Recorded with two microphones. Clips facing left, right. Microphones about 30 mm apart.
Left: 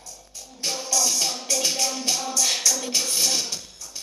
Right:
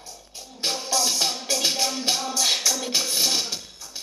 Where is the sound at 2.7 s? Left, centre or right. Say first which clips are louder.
Right 1 dB; centre.